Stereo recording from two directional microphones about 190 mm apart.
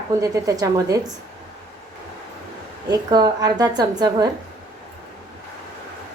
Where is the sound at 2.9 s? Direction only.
20° right (ahead or behind).